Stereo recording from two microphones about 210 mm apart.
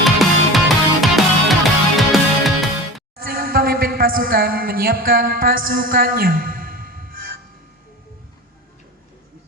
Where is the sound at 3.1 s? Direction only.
45° right (ahead or behind).